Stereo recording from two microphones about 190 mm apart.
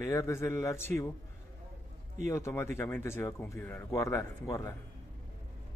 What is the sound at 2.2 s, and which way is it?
Speech, 15° left (ahead or behind).